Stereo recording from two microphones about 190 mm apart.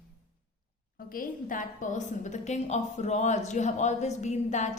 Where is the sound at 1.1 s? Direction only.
45° left (ahead or behind).